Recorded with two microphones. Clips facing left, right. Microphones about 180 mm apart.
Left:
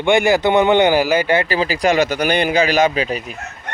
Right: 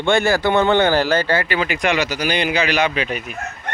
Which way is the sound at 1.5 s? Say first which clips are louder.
Left 3 dB; 35° left (ahead or behind).